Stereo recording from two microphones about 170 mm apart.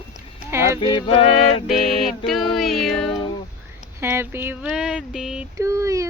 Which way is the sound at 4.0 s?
15° right (ahead or behind).